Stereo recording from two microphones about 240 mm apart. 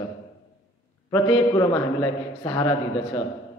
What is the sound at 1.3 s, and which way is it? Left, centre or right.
A man's voice, centre.